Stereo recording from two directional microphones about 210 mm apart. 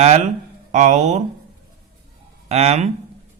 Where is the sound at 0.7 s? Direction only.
35° right (ahead or behind).